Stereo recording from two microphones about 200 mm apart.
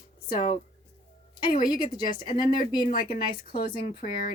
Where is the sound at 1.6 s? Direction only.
20° left (ahead or behind).